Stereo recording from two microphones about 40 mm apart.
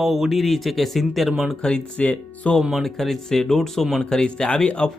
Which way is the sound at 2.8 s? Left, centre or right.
Centre.